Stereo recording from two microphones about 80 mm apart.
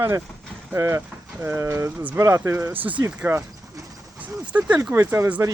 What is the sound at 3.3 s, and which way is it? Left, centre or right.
Speech, right.